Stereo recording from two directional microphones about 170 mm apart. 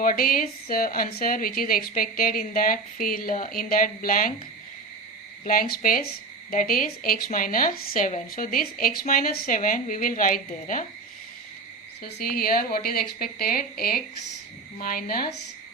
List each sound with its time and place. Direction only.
0.0 s a woman's voice: 55° left (ahead or behind)
5.5 s a woman's voice: 55° left (ahead or behind)
12.0 s a woman's voice: 60° left (ahead or behind)